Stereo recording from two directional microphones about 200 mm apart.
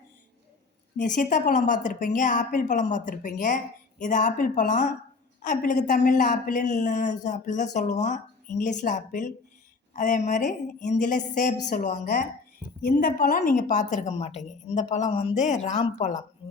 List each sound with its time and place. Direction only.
0.9 s a woman's voice: 40° left (ahead or behind)